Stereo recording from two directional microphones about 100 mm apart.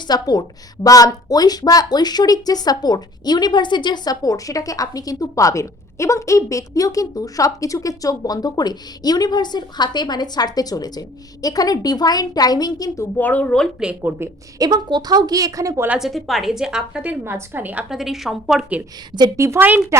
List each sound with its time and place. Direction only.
0.1 s a woman's voice: 40° left (ahead or behind)
13.1 s a woman's voice: 15° left (ahead or behind)
13.7 s a woman's voice: 10° right (ahead or behind)
14.6 s a woman's voice: 45° right (ahead or behind)
16.0 s a woman's voice: centre (ahead or behind)
17.2 s a woman's voice: 20° right (ahead or behind)
17.8 s a woman's voice: 5° right (ahead or behind)
19.4 s a woman's voice: 25° right (ahead or behind)